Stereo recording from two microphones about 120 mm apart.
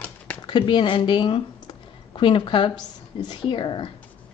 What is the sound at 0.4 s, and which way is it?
Speech, 40° left (ahead or behind).